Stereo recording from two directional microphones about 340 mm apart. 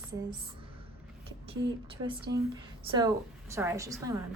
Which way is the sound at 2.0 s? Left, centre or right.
Centre.